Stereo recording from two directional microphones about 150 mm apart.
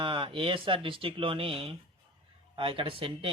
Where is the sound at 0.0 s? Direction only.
35° right (ahead or behind).